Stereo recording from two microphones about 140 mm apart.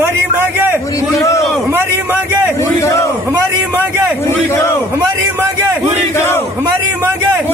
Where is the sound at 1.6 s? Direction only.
15° right (ahead or behind).